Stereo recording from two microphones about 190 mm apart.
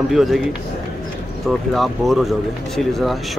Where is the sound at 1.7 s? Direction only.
Centre (ahead or behind).